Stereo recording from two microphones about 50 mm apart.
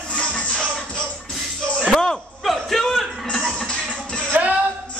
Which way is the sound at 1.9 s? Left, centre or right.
Centre.